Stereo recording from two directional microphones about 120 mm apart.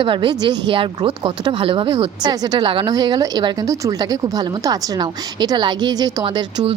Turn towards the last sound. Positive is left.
turn(degrees=-40)  # may be behind; listen again after turning